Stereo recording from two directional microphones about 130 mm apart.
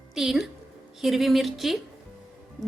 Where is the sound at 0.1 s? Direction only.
Centre (ahead or behind).